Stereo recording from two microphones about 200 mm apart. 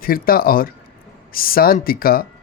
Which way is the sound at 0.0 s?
45° left (ahead or behind).